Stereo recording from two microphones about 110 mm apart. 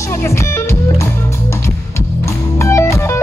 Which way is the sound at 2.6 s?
25° left (ahead or behind).